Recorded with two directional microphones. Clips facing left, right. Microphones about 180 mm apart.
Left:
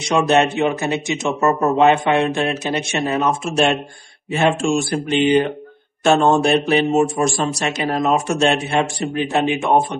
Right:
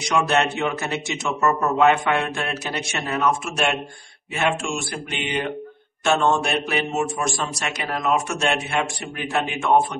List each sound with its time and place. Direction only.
0.3 s a man's voice: 20° left (ahead or behind)
1.4 s a man's voice: 30° left (ahead or behind)
9.3 s a man's voice: 20° left (ahead or behind)